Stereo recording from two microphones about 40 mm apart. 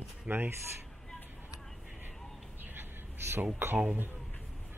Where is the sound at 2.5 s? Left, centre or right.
Right.